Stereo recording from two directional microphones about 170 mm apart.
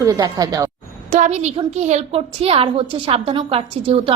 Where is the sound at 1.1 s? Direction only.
45° right (ahead or behind).